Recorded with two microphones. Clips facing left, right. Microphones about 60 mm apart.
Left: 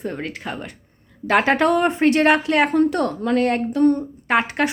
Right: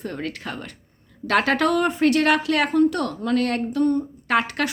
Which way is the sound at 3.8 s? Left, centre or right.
Left.